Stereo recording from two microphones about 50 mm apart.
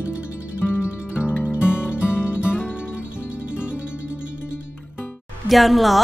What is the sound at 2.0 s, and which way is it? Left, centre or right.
Music, left.